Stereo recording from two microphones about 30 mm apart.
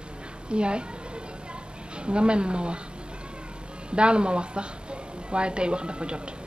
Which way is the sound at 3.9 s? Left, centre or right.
Right.